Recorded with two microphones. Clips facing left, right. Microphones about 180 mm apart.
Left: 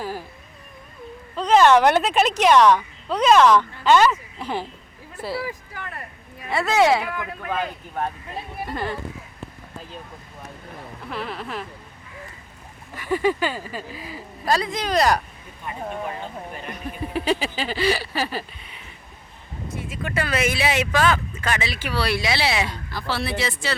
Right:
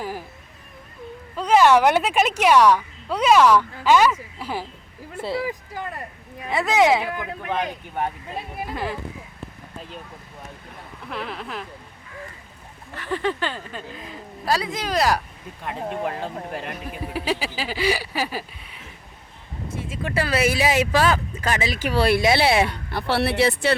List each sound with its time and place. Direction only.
0.0 s a woman's voice: 15° right (ahead or behind)
1.4 s a woman's voice: 10° right (ahead or behind)
5.1 s a woman's voice: 25° right (ahead or behind)
8.6 s speech: centre (ahead or behind)
11.0 s speech: centre (ahead or behind)
12.9 s speech: 10° left (ahead or behind)
16.0 s speech: 70° right (ahead or behind)
16.7 s a woman's voice: 5° right (ahead or behind)
19.7 s speech: 30° right (ahead or behind); by 23.7 s 60° right (ahead or behind)